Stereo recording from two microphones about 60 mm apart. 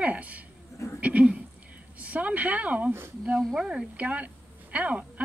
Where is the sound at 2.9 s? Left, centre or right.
Right.